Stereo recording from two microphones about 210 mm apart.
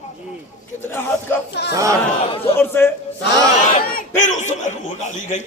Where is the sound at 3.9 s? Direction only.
35° left (ahead or behind).